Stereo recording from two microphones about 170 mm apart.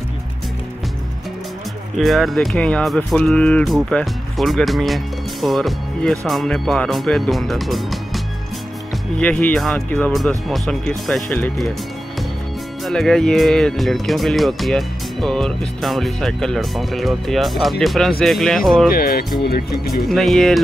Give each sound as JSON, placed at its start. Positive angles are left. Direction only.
{"t": 2.0, "sound": "speech", "side_deg": 0}
{"t": 9.2, "sound": "speech", "side_deg": 10}
{"t": 12.8, "sound": "speech", "side_deg": 0}
{"t": 18.9, "sound": "speech", "side_deg": 60}
{"t": 20.1, "sound": "speech", "side_deg": 0}